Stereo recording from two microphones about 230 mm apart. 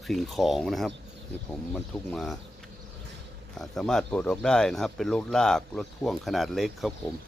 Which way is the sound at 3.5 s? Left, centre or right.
Centre.